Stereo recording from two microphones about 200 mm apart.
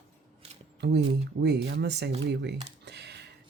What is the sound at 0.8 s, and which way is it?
Speech, 55° right (ahead or behind).